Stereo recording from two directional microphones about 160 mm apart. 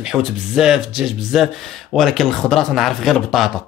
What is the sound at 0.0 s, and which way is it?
Speech, centre (ahead or behind).